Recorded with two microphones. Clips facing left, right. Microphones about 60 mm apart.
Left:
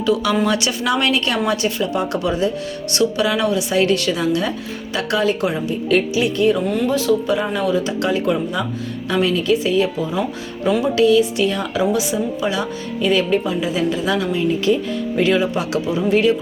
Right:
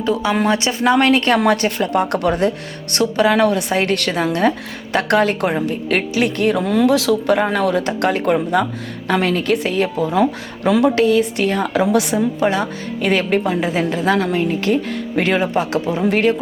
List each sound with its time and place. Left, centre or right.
0.0 s a woman's voice: right
2.9 s a woman's voice: right
7.3 s a woman's voice: right
10.9 s a woman's voice: right